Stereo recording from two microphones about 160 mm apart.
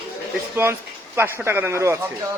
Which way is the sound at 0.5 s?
15° right (ahead or behind).